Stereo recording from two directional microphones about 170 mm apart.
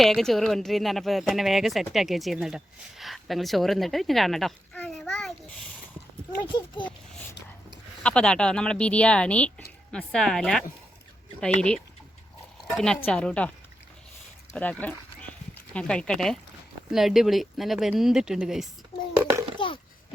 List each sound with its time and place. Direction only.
0.0 s speech: centre (ahead or behind)
6.4 s speech: 30° left (ahead or behind)
8.0 s a woman's voice: 5° left (ahead or behind)
14.5 s speech: 10° left (ahead or behind)
19.2 s a sound: 15° right (ahead or behind)
19.5 s a sound: 30° left (ahead or behind)